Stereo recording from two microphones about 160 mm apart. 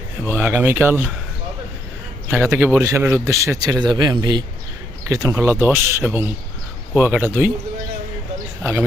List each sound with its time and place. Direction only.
0.3 s speech: 15° right (ahead or behind)
2.3 s speech: 15° right (ahead or behind)